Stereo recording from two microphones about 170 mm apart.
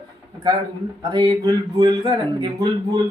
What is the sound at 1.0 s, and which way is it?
Speech, 25° right (ahead or behind).